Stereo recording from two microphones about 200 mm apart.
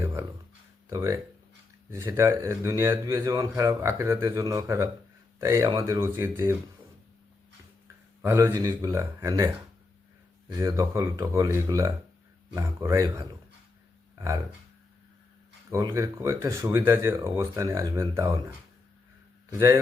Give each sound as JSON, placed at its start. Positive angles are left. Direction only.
{"t": 0.0, "sound": "a sound", "side_deg": -10}
{"t": 0.9, "sound": "speech", "side_deg": -15}
{"t": 8.2, "sound": "speech", "side_deg": -10}
{"t": 10.6, "sound": "speech", "side_deg": -15}
{"t": 15.7, "sound": "speech", "side_deg": -15}
{"t": 19.5, "sound": "speech", "side_deg": -15}